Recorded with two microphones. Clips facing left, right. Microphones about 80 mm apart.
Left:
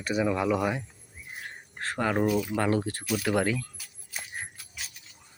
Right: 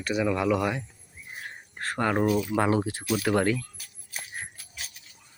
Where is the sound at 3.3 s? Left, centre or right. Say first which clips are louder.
Right 2 dB; centre.